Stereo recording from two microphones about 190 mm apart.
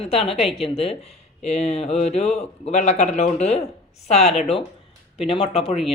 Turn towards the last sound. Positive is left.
turn(degrees=30)  # may be behind; listen again after turning